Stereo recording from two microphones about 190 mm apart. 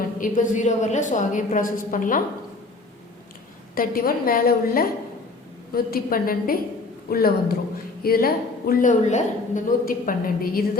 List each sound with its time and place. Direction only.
0.2 s a woman's voice: 40° left (ahead or behind)
3.8 s a woman's voice: 50° left (ahead or behind)